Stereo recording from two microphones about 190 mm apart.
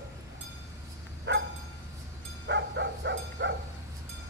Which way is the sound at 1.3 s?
70° right (ahead or behind).